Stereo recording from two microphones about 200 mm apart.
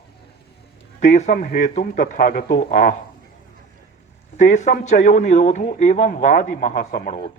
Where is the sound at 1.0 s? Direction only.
35° left (ahead or behind).